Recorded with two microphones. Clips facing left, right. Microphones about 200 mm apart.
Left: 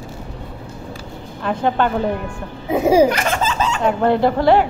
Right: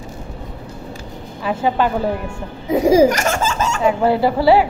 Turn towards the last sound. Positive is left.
turn(degrees=-5)  # may be behind; listen again after turning